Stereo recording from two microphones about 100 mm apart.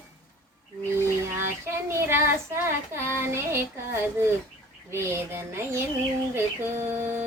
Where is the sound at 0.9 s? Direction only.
25° right (ahead or behind).